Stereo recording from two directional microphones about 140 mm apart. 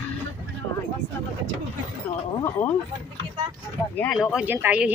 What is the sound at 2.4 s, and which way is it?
Speech, 15° left (ahead or behind).